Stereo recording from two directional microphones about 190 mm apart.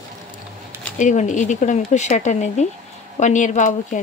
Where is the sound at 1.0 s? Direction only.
40° left (ahead or behind).